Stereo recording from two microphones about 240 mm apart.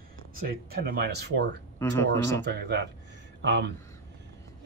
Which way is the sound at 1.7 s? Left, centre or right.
Centre.